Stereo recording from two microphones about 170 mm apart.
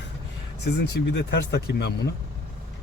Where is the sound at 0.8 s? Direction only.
85° left.